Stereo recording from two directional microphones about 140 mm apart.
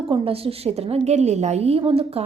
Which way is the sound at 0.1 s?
45° right (ahead or behind).